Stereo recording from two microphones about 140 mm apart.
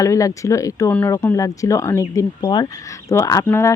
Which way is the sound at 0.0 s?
25° left (ahead or behind).